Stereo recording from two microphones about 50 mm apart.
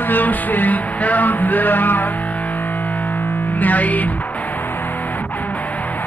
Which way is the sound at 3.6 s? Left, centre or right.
Left.